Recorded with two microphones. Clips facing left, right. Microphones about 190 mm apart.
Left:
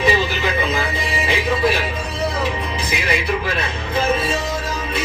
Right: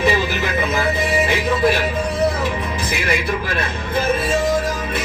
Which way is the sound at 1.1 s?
50° right (ahead or behind).